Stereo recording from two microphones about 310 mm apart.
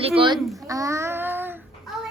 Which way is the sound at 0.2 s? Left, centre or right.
Centre.